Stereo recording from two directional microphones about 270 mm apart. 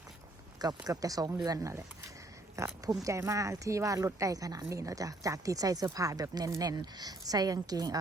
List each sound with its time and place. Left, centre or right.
0.9 s speech: centre